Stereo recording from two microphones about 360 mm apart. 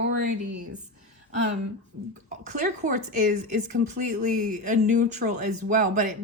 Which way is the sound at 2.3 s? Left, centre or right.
Right.